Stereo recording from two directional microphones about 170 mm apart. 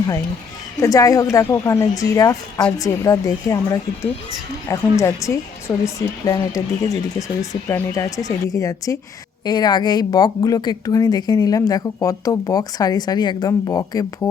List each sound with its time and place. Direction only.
0.8 s a woman's voice: 20° left (ahead or behind)